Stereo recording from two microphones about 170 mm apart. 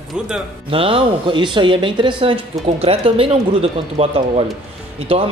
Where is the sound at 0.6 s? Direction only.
35° right (ahead or behind).